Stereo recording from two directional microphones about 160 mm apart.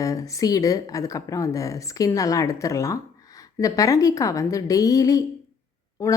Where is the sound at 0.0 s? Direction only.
20° left (ahead or behind).